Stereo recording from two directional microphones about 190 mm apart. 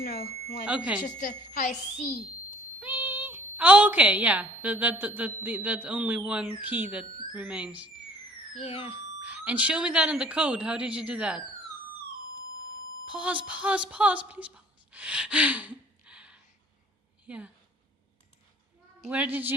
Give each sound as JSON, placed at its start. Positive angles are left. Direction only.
{"t": 0.6, "sound": "a woman's voice", "side_deg": -5}
{"t": 1.0, "sound": "a woman's voice", "side_deg": 45}
{"t": 2.8, "sound": "a woman's voice", "side_deg": -10}
{"t": 8.5, "sound": "a woman's voice", "side_deg": 30}
{"t": 9.2, "sound": "speech", "side_deg": -10}
{"t": 13.1, "sound": "a woman's voice", "side_deg": -5}
{"t": 19.1, "sound": "speech", "side_deg": -10}